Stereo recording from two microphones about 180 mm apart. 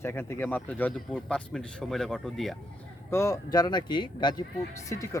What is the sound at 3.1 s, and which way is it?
Speech, 15° left (ahead or behind).